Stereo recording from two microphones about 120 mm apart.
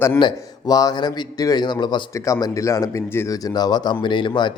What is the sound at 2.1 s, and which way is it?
Speech, 25° left (ahead or behind).